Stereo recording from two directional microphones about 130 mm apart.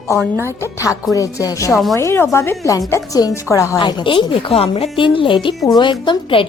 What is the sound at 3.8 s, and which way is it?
A woman's voice, 35° left (ahead or behind).